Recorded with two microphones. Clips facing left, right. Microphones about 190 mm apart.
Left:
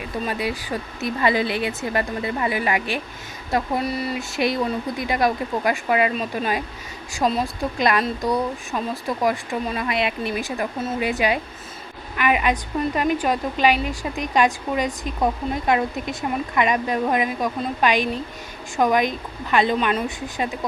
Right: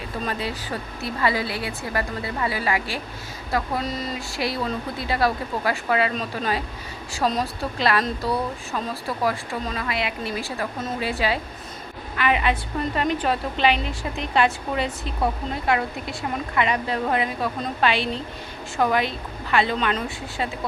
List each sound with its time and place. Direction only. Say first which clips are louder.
0.3 s a woman's voice: left 3 dB; 10° left (ahead or behind)